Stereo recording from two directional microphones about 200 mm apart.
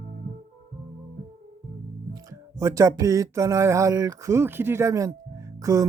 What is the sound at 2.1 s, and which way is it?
Music, 15° right (ahead or behind).